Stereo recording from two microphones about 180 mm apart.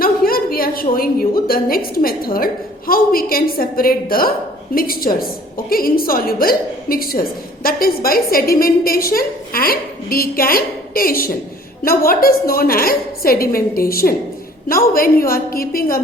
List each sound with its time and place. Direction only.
0.0 s a woman's voice: 55° left (ahead or behind)